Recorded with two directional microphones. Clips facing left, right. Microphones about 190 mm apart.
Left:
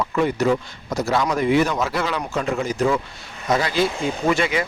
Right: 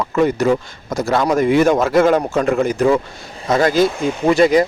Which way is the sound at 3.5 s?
50° right (ahead or behind).